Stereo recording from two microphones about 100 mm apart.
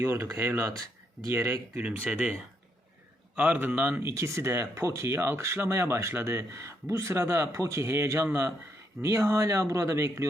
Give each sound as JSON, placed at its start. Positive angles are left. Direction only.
{"t": 0.0, "sound": "speech", "side_deg": -25}
{"t": 1.8, "sound": "speech", "side_deg": -10}
{"t": 3.3, "sound": "speech", "side_deg": -15}